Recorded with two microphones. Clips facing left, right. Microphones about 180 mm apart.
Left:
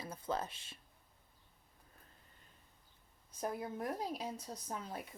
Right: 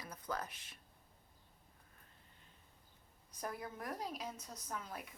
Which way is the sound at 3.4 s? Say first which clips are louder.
Left 5 dB; 25° left (ahead or behind).